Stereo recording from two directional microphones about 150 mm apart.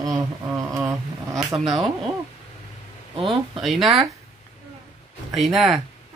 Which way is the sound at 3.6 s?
Centre (ahead or behind).